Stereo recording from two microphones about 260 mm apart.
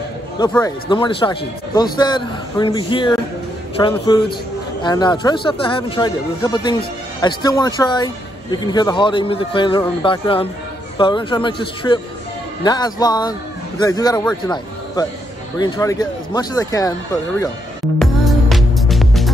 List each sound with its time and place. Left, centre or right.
0.5 s a man's voice: centre
15.5 s speech: centre
17.9 s music: centre